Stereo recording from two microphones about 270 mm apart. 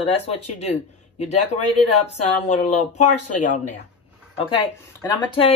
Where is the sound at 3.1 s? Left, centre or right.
Left.